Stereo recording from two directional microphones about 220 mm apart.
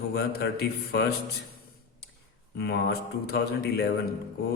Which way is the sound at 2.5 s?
45° left (ahead or behind).